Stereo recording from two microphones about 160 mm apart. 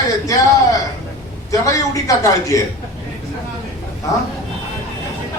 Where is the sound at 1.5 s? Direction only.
20° left (ahead or behind).